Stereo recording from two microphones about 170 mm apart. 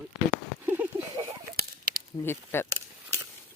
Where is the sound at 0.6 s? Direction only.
10° right (ahead or behind).